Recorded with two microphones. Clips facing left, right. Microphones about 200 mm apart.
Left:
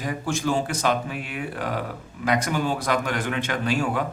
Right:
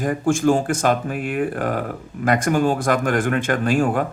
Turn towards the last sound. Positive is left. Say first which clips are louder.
# right 6 dB
turn(degrees=-50)  # may be behind; listen again after turning